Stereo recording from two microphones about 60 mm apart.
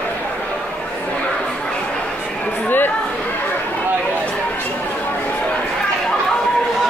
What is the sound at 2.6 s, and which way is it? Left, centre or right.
Chatter, left.